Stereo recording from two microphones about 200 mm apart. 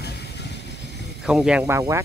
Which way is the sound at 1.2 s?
Centre (ahead or behind).